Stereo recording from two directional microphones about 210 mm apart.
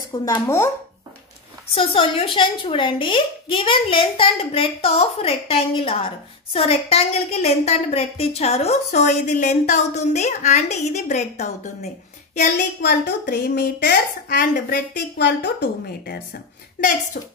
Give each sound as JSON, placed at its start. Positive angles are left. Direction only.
{"t": 0.1, "sound": "speech", "side_deg": 15}
{"t": 1.8, "sound": "a woman's voice", "side_deg": 25}
{"t": 13.2, "sound": "a woman's voice", "side_deg": 55}